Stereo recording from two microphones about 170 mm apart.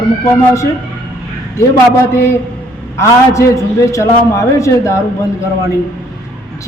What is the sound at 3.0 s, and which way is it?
A man's voice, 20° left (ahead or behind).